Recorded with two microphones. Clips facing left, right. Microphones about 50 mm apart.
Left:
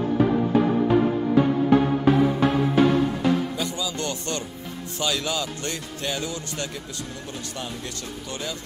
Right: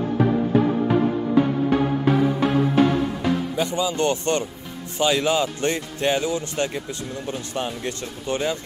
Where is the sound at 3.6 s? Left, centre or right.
Right.